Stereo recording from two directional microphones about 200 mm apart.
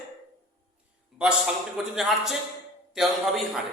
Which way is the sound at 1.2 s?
5° right (ahead or behind).